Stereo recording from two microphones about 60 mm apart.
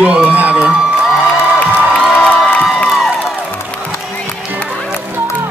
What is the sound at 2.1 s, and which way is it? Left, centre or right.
Cheering, centre.